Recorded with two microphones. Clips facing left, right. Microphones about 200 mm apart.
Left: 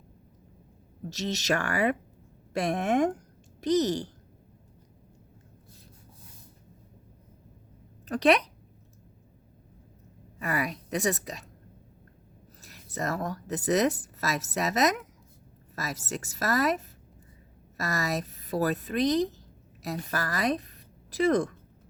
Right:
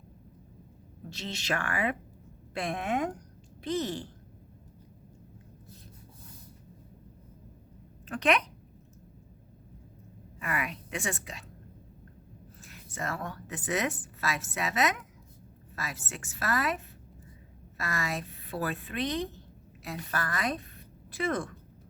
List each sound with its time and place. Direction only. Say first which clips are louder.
1.1 s speech: left 6 dB; 40° left (ahead or behind)
8.0 s speech: left 5 dB; 35° left (ahead or behind)
10.4 s speech: left 4 dB; 35° left (ahead or behind)
12.6 s a woman's voice: left 5 dB; 40° left (ahead or behind)